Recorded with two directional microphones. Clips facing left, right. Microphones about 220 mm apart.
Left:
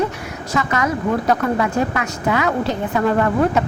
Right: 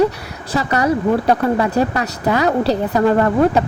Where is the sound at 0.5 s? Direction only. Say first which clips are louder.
Right 4 dB; 35° right (ahead or behind).